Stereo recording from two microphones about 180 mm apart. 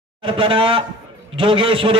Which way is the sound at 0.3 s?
30° right (ahead or behind).